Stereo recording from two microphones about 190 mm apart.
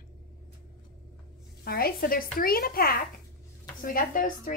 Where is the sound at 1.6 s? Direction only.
55° left (ahead or behind).